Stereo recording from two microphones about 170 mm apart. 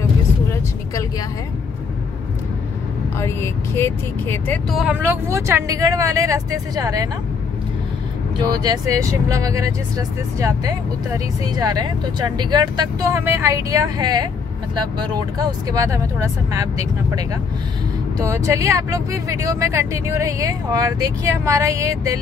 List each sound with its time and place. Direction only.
3.2 s speech: 15° left (ahead or behind)
4.6 s speech: 5° right (ahead or behind); by 7.1 s 20° right (ahead or behind)
8.4 s speech: 20° right (ahead or behind)